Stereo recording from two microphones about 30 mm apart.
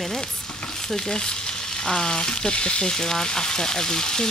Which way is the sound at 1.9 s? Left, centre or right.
Left.